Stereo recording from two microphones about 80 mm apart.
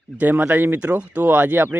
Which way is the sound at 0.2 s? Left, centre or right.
Right.